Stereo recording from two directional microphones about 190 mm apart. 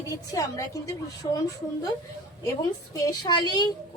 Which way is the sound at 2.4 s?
15° left (ahead or behind).